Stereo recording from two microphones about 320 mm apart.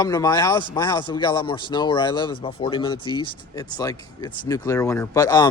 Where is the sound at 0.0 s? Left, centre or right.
Centre.